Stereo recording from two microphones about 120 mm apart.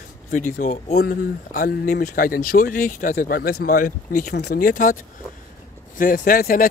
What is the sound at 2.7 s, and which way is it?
Speech, 90° left.